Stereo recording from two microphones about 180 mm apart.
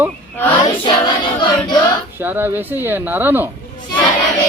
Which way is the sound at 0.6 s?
25° left (ahead or behind).